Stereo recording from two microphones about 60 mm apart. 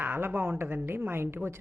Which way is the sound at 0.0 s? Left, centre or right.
Right.